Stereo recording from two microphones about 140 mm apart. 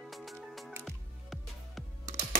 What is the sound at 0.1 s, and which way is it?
Music, centre (ahead or behind).